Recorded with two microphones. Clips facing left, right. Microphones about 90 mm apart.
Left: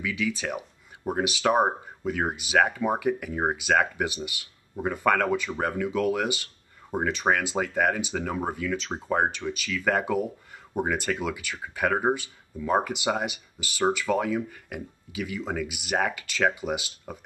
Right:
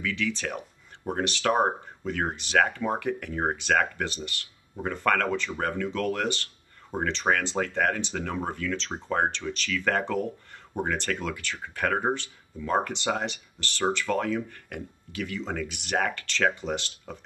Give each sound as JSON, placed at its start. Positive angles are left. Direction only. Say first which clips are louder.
{"t": 0.0, "sound": "speech", "louder": "left 1 dB", "side_deg": 10}